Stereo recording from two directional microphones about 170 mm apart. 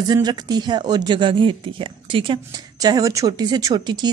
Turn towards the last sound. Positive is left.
turn(degrees=-25)  # may be behind; listen again after turning